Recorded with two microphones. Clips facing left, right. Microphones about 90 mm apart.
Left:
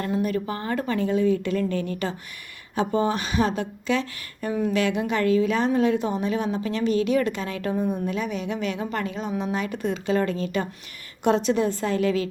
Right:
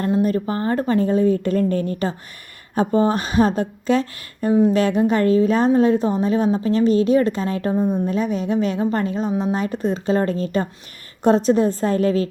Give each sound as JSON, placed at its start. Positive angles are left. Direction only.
{"t": 0.0, "sound": "a woman's voice", "side_deg": -35}